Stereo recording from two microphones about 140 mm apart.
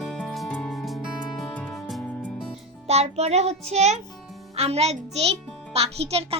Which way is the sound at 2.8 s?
50° right (ahead or behind).